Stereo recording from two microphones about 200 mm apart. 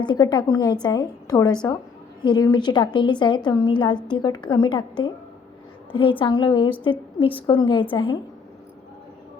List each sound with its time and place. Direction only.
0.0 s a woman's voice: 20° left (ahead or behind)